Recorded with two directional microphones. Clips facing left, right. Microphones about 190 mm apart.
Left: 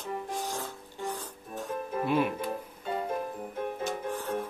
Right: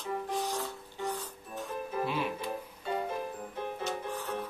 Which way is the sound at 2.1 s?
50° left (ahead or behind).